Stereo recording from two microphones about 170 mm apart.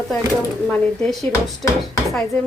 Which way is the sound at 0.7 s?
5° left (ahead or behind).